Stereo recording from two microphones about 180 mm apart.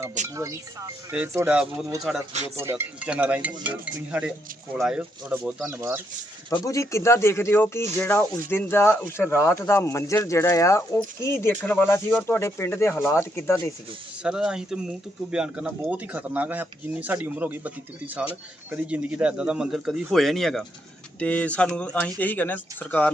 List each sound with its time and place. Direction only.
0.3 s speech: 20° right (ahead or behind)
6.6 s speech: 15° left (ahead or behind)
14.2 s speech: 5° right (ahead or behind)